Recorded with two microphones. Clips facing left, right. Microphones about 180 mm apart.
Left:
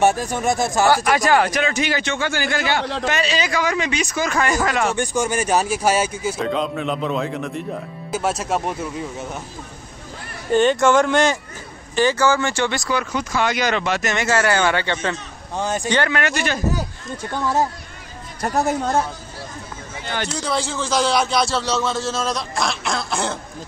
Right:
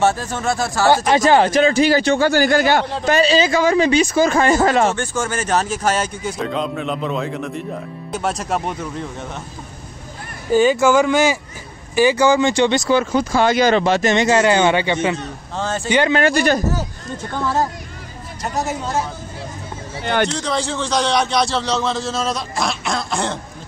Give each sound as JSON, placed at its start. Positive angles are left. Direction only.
{"t": 0.0, "sound": "speech", "side_deg": 15}
{"t": 0.8, "sound": "a man's voice", "side_deg": -25}
{"t": 4.9, "sound": "a man's voice", "side_deg": 15}
{"t": 10.5, "sound": "a man's voice", "side_deg": -5}
{"t": 15.5, "sound": "speech", "side_deg": 15}
{"t": 16.1, "sound": "a man's voice", "side_deg": -35}
{"t": 18.4, "sound": "speech", "side_deg": 55}
{"t": 20.2, "sound": "a man's voice", "side_deg": 5}